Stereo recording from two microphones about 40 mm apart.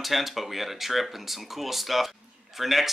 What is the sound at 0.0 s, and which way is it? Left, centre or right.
Speech, centre.